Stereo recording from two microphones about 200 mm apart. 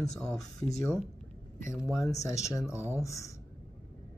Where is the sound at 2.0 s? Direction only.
15° left (ahead or behind).